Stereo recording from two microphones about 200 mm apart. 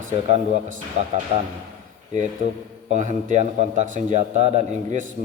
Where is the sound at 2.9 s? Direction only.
40° right (ahead or behind).